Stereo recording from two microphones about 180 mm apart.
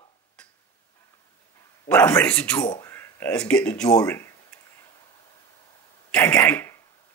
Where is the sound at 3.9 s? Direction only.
15° left (ahead or behind).